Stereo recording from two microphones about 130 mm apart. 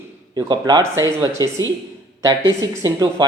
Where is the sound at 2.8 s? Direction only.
25° right (ahead or behind).